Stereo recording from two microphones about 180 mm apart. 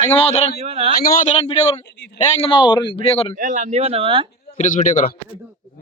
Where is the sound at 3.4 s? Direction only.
45° right (ahead or behind); by 4.3 s 30° right (ahead or behind).